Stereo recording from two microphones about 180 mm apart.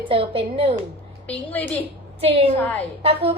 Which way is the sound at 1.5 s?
10° left (ahead or behind).